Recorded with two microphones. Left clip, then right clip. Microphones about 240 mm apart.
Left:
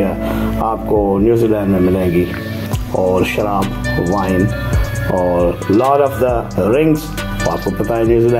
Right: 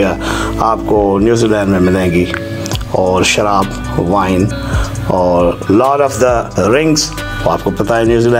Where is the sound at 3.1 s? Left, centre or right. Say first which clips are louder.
Right 7 dB; right.